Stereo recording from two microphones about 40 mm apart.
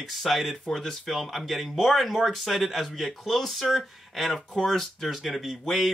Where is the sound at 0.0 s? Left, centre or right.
Centre.